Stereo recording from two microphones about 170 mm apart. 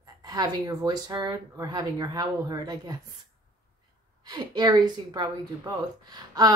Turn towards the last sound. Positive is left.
turn(degrees=-25)  # may be behind; listen again after turning